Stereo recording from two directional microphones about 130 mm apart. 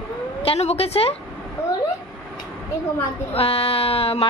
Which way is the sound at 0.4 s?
50° left (ahead or behind).